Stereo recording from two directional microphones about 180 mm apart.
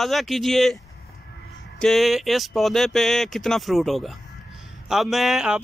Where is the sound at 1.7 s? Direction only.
Centre (ahead or behind).